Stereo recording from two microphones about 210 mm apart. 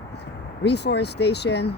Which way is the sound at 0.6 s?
55° left (ahead or behind).